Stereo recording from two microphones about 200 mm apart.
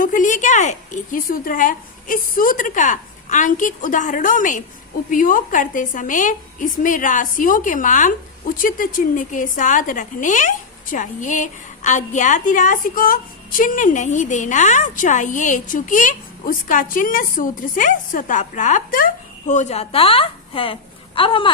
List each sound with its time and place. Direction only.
0.0 s a woman's voice: 40° left (ahead or behind); by 21.5 s 25° left (ahead or behind)